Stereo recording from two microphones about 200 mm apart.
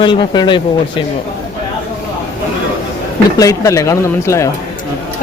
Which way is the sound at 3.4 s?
15° left (ahead or behind).